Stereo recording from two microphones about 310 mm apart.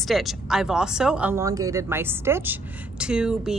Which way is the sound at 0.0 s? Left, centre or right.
Centre.